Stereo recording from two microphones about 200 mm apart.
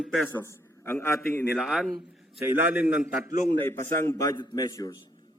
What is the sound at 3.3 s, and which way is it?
Speech, 40° left (ahead or behind).